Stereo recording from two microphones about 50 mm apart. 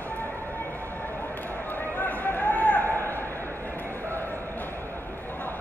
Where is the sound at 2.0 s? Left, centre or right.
Left.